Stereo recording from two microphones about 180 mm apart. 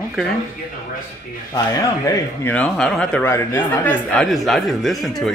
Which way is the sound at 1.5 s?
20° left (ahead or behind).